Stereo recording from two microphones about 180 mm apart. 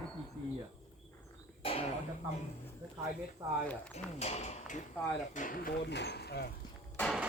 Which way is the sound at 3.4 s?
25° right (ahead or behind).